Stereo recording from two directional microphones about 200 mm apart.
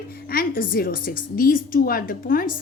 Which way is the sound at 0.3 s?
45° left (ahead or behind).